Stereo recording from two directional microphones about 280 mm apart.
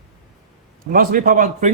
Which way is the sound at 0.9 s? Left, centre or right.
Right.